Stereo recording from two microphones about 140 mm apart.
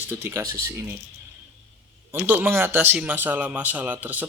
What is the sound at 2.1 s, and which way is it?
Speech, 15° right (ahead or behind).